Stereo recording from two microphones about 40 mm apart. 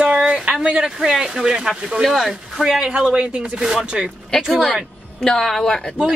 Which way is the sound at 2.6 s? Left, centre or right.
Right.